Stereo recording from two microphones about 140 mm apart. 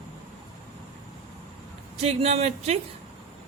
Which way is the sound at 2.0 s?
45° right (ahead or behind).